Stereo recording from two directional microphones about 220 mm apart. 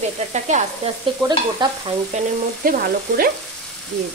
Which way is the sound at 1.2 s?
20° right (ahead or behind).